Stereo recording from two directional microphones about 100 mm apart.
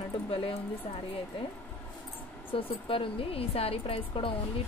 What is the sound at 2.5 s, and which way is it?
A woman's voice, 65° left (ahead or behind).